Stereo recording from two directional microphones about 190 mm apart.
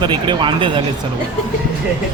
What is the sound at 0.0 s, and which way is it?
Speech, 25° right (ahead or behind).